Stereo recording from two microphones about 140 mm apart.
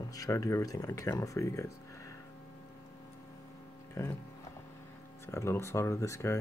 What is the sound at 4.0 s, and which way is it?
Speech, 20° left (ahead or behind).